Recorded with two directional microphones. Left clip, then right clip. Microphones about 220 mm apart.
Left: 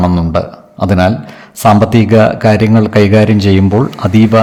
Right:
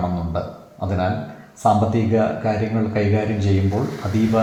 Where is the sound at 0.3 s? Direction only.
50° left (ahead or behind).